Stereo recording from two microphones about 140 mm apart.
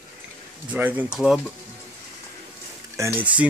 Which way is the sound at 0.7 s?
10° right (ahead or behind).